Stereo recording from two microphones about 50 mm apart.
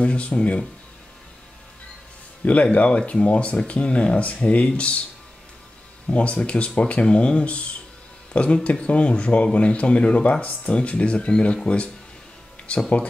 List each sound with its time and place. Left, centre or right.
0.0 s speech: left
2.4 s speech: left
6.0 s speech: left